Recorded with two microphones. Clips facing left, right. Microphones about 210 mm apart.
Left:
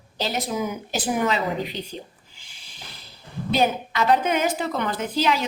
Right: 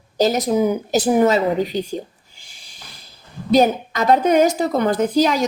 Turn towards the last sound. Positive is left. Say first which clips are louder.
# right 7 dB
turn(degrees=-40)  # may be behind; listen again after turning